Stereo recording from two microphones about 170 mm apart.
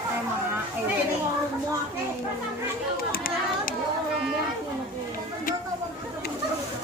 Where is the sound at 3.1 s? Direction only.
55° left (ahead or behind).